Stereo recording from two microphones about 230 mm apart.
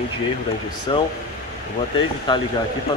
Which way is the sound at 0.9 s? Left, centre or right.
Left.